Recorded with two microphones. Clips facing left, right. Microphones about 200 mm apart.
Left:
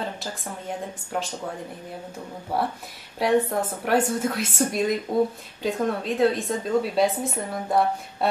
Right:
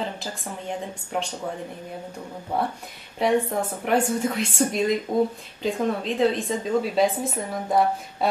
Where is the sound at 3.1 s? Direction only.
Centre (ahead or behind).